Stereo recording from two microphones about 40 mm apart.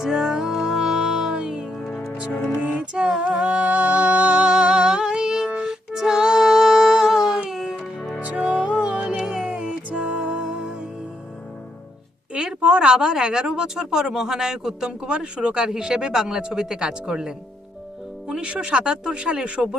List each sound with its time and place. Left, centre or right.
0.0 s music: centre
1.3 s music: right
3.7 s music: right
4.4 s music: right
5.9 s child singing: centre
7.5 s music: centre
8.2 s music: right
10.4 s music: right
12.3 s a sound: right
13.4 s a man's voice: centre